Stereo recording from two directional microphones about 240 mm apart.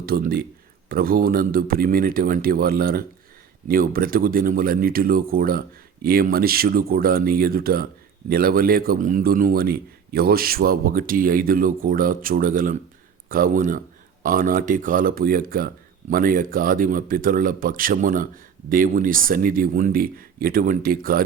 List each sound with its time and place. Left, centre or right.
0.0 s speech: right